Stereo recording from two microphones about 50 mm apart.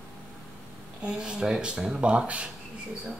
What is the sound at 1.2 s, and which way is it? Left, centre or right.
Speech, centre.